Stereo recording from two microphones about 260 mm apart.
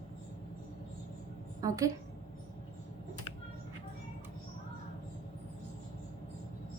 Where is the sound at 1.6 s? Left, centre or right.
Centre.